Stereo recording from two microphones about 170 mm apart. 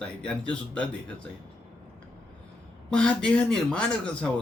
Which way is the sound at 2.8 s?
5° left (ahead or behind).